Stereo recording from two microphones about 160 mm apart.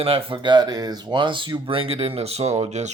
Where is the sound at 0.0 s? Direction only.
35° right (ahead or behind).